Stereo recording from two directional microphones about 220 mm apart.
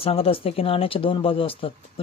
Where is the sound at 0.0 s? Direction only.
25° left (ahead or behind).